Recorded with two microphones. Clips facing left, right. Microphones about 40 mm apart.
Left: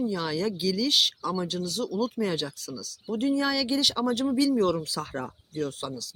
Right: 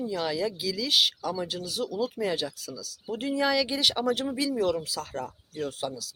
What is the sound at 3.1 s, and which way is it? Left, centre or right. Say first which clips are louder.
Speech: left 1 dB; right.